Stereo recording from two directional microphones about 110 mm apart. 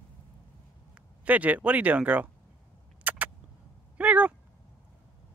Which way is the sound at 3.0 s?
15° right (ahead or behind).